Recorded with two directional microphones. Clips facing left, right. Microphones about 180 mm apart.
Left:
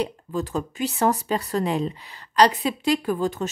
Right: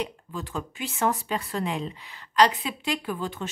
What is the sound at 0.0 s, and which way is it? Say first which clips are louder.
Speech: left 6 dB; 40° left (ahead or behind).